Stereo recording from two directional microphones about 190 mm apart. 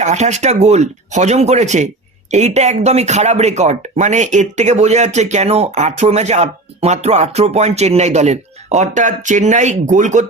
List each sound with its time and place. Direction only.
0.0 s speech: 35° right (ahead or behind)